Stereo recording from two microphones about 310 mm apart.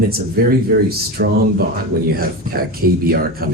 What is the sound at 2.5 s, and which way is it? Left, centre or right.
Speech, right.